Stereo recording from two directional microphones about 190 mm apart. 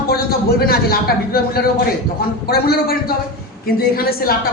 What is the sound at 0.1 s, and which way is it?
A man's voice, 55° left (ahead or behind).